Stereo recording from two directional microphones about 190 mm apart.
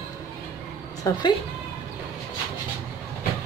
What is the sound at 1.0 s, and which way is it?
Speech, 15° left (ahead or behind).